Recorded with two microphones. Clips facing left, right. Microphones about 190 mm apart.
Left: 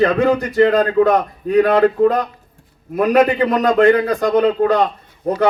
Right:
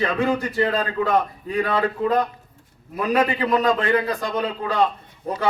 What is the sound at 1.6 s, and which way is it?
Speech, 70° left (ahead or behind).